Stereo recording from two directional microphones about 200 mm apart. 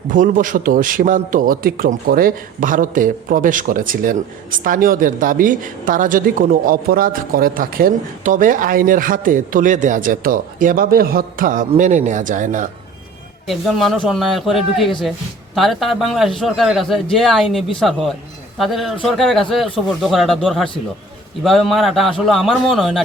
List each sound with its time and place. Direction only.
0.1 s a man's voice: 40° right (ahead or behind)
13.5 s speech: centre (ahead or behind)